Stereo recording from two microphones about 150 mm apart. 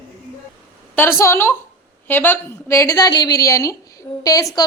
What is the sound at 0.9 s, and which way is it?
A woman's voice, 15° left (ahead or behind).